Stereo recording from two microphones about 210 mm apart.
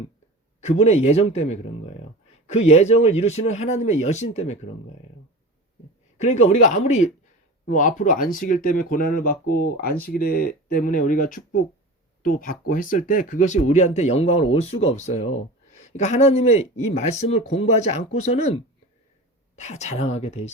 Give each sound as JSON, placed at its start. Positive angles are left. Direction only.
{"t": 0.6, "sound": "speech", "side_deg": 30}
{"t": 6.1, "sound": "speech", "side_deg": 30}